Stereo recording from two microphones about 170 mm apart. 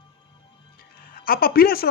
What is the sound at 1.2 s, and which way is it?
Speech, 60° left (ahead or behind).